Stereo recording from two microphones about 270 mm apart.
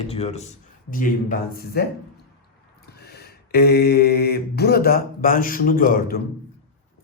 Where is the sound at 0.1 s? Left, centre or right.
Left.